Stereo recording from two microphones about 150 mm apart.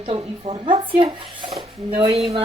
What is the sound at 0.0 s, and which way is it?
A woman's voice, 40° right (ahead or behind).